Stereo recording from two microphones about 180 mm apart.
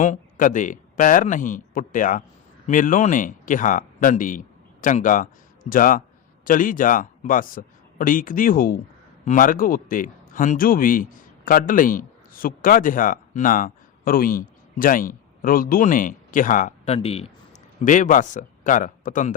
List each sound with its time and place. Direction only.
0.0 s a man's voice: 45° left (ahead or behind)
17.8 s speech: 45° left (ahead or behind)